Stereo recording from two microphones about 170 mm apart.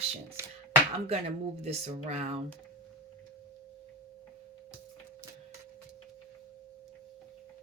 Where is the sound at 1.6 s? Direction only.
40° right (ahead or behind).